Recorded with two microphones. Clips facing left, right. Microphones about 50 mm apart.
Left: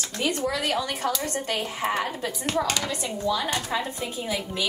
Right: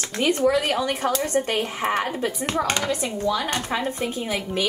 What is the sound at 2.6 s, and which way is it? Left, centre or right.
A woman's voice, right.